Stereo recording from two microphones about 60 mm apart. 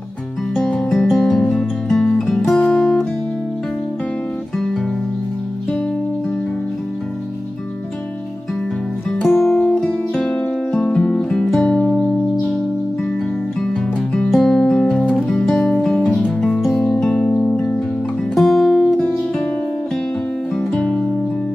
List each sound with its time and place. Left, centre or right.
0.6 s music: centre
9.3 s music: centre
9.7 s music: centre
11.9 s music: centre
14.3 s music: centre
16.9 s music: centre
18.3 s music: centre